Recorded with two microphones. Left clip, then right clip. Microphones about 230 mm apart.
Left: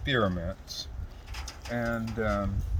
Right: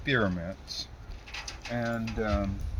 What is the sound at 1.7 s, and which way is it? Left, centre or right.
Speech, centre.